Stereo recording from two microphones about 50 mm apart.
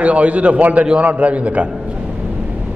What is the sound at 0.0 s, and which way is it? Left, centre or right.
A man's voice, right.